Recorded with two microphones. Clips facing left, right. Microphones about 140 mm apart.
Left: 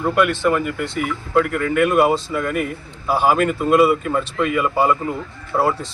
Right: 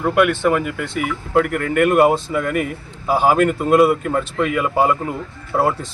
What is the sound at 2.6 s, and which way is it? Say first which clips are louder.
Speech: right 1 dB; centre (ahead or behind).